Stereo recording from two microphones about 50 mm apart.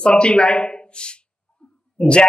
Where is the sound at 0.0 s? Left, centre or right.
Left.